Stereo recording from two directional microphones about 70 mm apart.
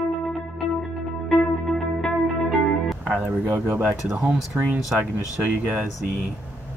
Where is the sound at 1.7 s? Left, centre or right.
Centre.